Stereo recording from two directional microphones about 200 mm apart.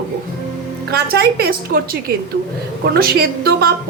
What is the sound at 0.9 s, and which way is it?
A woman's voice, 50° right (ahead or behind).